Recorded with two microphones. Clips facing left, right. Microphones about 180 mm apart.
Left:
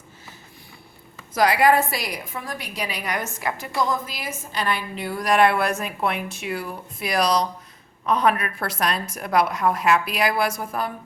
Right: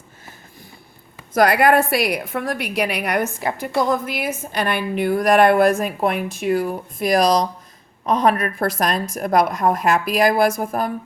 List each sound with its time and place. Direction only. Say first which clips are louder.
1.3 s a woman's voice: right 3 dB; 55° right (ahead or behind)